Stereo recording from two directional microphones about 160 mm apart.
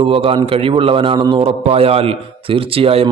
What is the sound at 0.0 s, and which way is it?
Speech, 35° right (ahead or behind).